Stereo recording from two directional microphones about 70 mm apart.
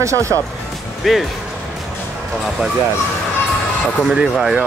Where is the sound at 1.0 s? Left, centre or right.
Centre.